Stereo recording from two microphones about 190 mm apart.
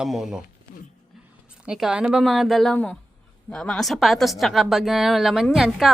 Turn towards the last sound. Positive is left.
turn(degrees=0)  # may be behind; listen again after turning